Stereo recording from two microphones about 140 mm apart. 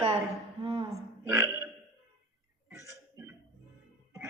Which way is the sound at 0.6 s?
35° right (ahead or behind).